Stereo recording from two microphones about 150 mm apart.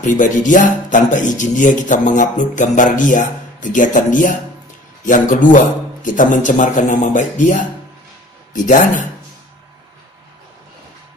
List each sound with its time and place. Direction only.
0.0 s speech: 60° left (ahead or behind)